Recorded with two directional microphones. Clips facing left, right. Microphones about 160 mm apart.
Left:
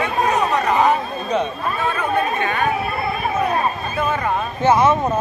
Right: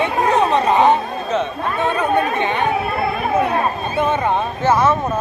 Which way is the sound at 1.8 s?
20° right (ahead or behind).